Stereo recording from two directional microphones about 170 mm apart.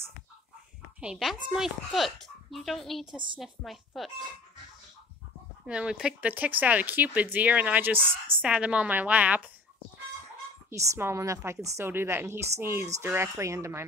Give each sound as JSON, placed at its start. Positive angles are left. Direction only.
{"t": 1.0, "sound": "a child's voice", "side_deg": 0}
{"t": 5.7, "sound": "speech", "side_deg": -5}
{"t": 10.7, "sound": "speech", "side_deg": -15}